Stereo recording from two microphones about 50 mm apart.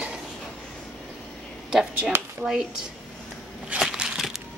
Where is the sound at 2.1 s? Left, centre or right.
Right.